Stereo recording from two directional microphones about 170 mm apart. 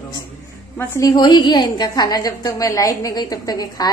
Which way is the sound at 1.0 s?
25° left (ahead or behind).